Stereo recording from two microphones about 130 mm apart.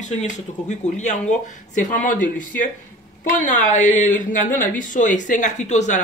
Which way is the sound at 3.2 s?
75° left (ahead or behind).